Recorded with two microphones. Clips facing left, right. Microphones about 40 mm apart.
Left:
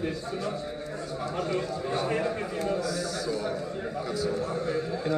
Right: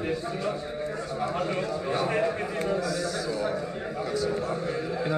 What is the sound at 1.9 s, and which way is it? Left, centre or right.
Speech, centre.